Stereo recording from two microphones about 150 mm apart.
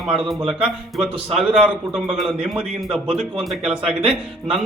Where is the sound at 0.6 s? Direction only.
5° right (ahead or behind).